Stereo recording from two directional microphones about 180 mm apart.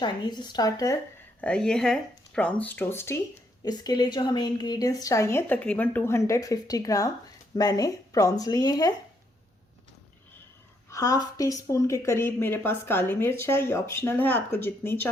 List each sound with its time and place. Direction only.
0.0 s a woman's voice: 25° left (ahead or behind)
1.4 s a woman's voice: 5° left (ahead or behind); by 8.9 s 20° left (ahead or behind)
10.9 s a woman's voice: 20° left (ahead or behind)